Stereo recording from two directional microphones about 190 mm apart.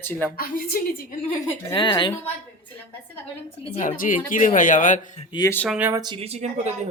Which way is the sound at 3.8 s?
45° left (ahead or behind).